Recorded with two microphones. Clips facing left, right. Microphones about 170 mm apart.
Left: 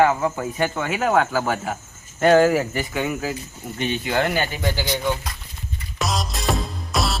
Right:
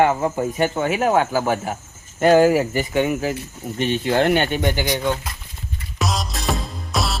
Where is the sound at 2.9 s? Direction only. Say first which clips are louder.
Right 5 dB; 30° right (ahead or behind).